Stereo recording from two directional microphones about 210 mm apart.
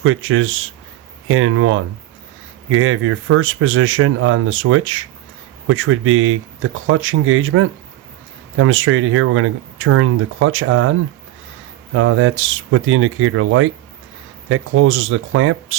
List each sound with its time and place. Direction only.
0.0 s speech: 75° right (ahead or behind)
11.9 s speech: 75° right (ahead or behind)